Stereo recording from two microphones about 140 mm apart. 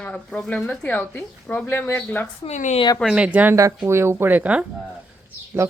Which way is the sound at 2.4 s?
55° left (ahead or behind).